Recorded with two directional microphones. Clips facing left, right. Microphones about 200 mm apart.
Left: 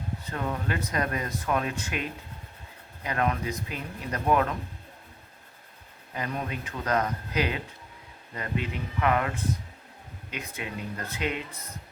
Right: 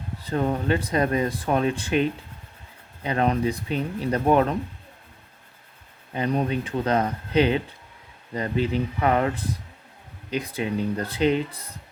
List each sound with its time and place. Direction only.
0.2 s speech: 35° right (ahead or behind)
6.1 s speech: 30° right (ahead or behind)